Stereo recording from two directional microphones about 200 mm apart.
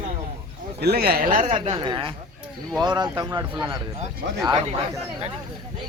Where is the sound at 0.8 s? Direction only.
50° right (ahead or behind).